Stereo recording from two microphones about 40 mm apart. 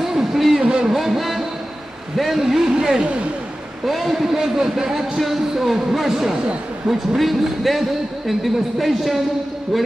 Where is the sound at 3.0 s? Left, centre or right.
Right.